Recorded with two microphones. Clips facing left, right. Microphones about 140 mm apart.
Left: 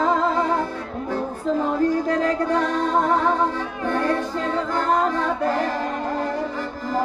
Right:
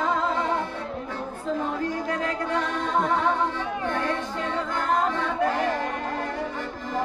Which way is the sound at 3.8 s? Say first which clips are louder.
Left 7 dB; 40° left (ahead or behind).